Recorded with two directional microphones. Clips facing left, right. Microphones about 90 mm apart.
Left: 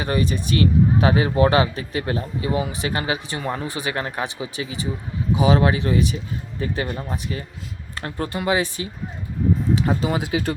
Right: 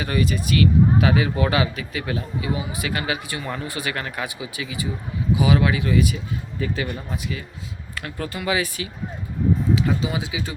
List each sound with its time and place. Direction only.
0.0 s speech: 30° left (ahead or behind)
2.8 s speech: 30° left (ahead or behind)
10.0 s speech: 50° left (ahead or behind)